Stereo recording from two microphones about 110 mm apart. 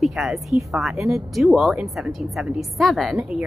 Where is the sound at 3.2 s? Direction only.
10° right (ahead or behind).